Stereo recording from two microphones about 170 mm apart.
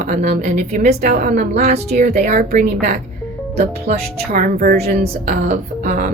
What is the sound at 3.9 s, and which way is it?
Speech, 55° right (ahead or behind).